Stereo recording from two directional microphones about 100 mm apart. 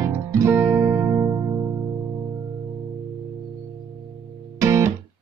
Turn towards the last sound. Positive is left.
turn(degrees=-30)  # may be behind; listen again after turning